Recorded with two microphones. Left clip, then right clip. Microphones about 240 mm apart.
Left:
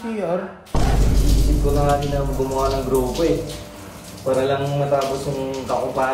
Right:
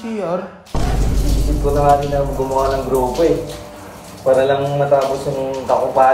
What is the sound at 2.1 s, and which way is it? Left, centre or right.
Speech, right.